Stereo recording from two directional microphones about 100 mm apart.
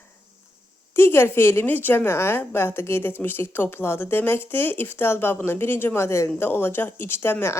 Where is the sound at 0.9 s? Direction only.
25° left (ahead or behind).